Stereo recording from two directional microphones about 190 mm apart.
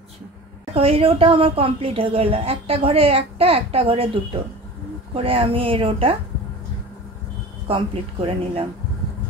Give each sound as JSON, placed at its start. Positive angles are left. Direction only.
{"t": 0.7, "sound": "a woman's voice", "side_deg": -30}
{"t": 7.6, "sound": "a woman's voice", "side_deg": -30}